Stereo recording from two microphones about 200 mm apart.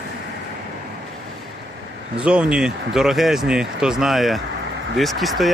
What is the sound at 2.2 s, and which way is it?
Speech, 5° right (ahead or behind).